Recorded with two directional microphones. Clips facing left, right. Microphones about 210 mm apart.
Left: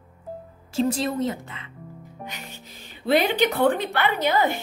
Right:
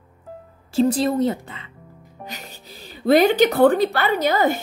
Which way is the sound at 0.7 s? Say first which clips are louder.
Right 5 dB; 35° right (ahead or behind).